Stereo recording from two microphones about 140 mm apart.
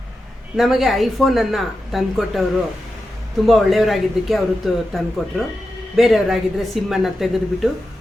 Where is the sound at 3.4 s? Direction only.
Centre (ahead or behind).